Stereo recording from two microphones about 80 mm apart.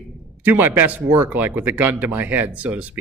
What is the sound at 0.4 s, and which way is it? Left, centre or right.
Speech, right.